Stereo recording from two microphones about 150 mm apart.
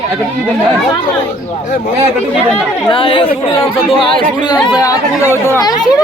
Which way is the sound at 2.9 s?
35° left (ahead or behind).